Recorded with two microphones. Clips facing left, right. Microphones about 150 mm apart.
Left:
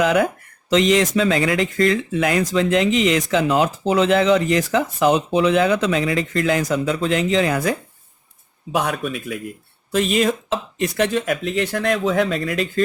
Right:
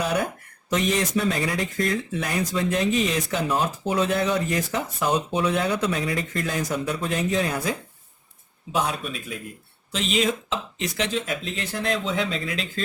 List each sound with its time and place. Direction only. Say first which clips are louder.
0.0 s speech: left 7 dB; 90° left
8.8 s speech: left 2 dB; 60° left (ahead or behind)